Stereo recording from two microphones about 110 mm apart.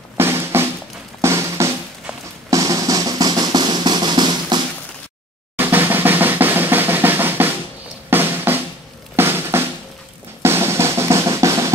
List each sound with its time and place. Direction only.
0.2 s a sound: 20° right (ahead or behind)
1.2 s drum: 25° right (ahead or behind); by 4.6 s 40° right (ahead or behind)
5.6 s drum roll: 20° right (ahead or behind)
8.1 s music: 20° right (ahead or behind)
9.1 s drum: 20° right (ahead or behind)